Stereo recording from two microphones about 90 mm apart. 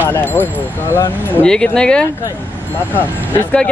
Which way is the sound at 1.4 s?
10° left (ahead or behind).